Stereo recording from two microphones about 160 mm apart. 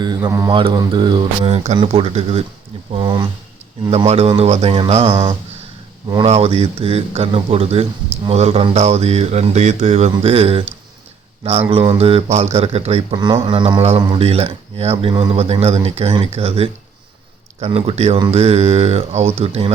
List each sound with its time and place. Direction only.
0.0 s speech: 25° right (ahead or behind)
1.5 s speech: 40° right (ahead or behind)
2.9 s speech: 30° right (ahead or behind)
3.8 s speech: 40° right (ahead or behind)
6.2 s speech: 40° right (ahead or behind)
11.7 s speech: 35° right (ahead or behind)
13.1 s speech: 25° right (ahead or behind)
15.1 s speech: 30° right (ahead or behind)